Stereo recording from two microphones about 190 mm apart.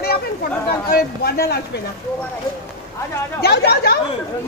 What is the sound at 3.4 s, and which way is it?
Speech, 60° left (ahead or behind).